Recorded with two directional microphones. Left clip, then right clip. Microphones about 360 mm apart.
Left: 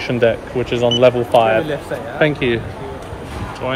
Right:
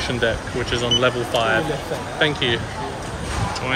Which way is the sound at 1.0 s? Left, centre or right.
Centre.